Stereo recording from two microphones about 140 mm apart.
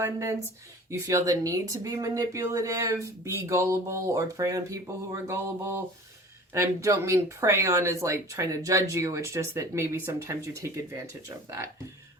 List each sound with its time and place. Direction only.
0.0 s speech: 20° right (ahead or behind)
5.3 s a sound: 20° right (ahead or behind)
6.5 s speech: 20° right (ahead or behind)